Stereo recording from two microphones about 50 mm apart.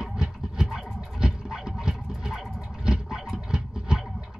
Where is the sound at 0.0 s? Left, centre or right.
Centre.